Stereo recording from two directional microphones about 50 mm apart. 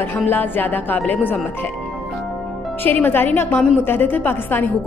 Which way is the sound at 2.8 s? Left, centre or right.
Left.